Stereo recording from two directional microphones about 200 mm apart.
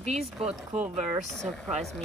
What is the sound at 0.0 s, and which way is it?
Speech, 35° right (ahead or behind).